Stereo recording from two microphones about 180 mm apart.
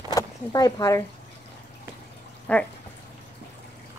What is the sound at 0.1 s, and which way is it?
Speech, 20° left (ahead or behind).